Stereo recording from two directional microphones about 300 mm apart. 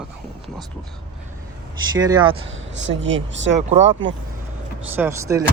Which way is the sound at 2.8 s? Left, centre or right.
Right.